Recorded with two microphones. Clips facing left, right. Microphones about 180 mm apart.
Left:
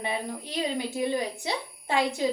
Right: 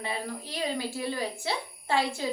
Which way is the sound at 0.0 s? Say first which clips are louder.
Left 3 dB; 20° left (ahead or behind).